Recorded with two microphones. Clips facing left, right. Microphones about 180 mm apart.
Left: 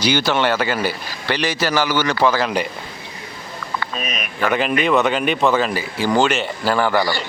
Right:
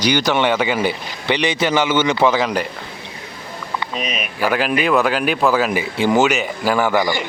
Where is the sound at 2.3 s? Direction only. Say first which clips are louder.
Right 1 dB; centre (ahead or behind).